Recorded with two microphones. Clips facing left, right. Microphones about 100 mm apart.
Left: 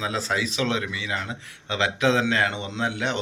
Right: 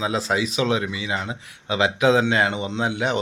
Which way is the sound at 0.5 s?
15° right (ahead or behind).